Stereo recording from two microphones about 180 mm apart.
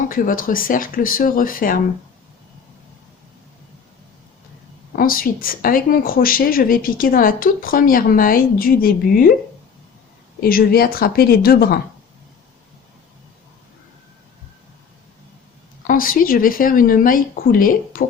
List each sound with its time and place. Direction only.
0.1 s speech: 50° left (ahead or behind)
4.9 s speech: 50° left (ahead or behind)
10.4 s speech: 55° left (ahead or behind)
15.9 s speech: 50° left (ahead or behind)